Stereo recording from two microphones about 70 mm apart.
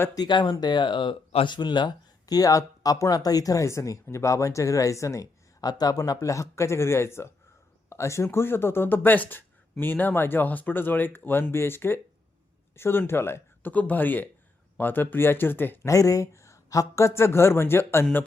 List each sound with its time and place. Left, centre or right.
0.1 s speech: left
15.9 s speech: left